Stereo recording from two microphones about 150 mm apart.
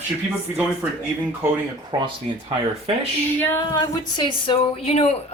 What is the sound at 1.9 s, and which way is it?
Speech, 30° right (ahead or behind).